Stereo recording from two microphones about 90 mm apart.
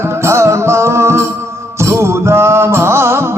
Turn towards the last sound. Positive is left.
turn(degrees=-30)  # may be behind; listen again after turning